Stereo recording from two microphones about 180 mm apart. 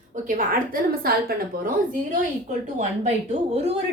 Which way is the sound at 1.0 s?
55° right (ahead or behind).